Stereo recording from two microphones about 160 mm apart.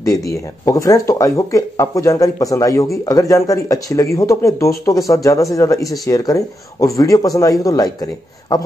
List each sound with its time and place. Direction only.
0.0 s speech: 20° left (ahead or behind)